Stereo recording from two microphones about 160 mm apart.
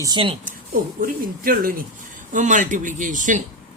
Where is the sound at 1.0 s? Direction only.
60° right (ahead or behind).